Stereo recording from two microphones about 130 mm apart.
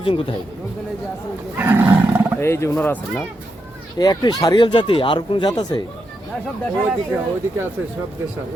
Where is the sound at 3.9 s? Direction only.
30° left (ahead or behind).